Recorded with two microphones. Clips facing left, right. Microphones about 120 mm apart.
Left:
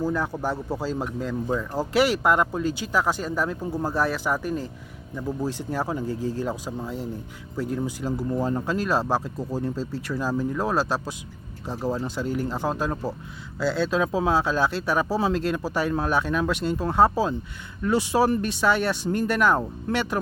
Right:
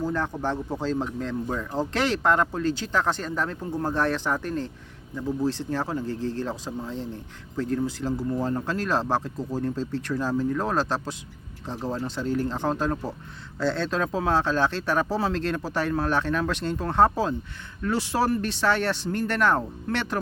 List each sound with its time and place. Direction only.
0.0 s speech: 10° left (ahead or behind)